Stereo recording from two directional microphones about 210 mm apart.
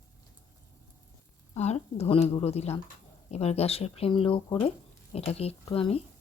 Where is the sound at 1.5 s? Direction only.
30° left (ahead or behind).